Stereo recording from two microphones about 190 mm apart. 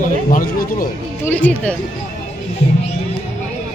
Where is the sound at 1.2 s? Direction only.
10° left (ahead or behind).